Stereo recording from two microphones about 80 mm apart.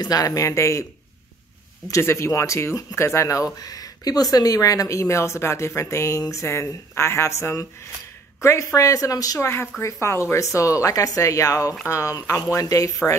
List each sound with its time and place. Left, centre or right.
0.0 s speech: left
1.9 s speech: left
9.4 s speech: left